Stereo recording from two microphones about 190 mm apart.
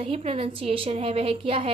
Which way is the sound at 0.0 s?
30° right (ahead or behind).